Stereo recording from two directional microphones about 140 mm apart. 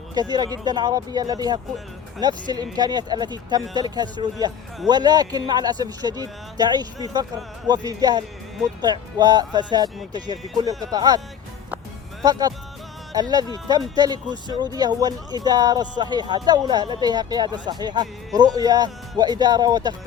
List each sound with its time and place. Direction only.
0.1 s speech: 30° right (ahead or behind)
12.2 s speech: 25° right (ahead or behind)